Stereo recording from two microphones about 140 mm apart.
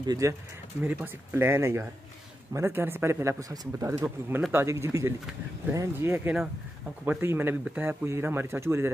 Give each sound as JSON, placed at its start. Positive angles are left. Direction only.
{"t": 0.0, "sound": "speech", "side_deg": -25}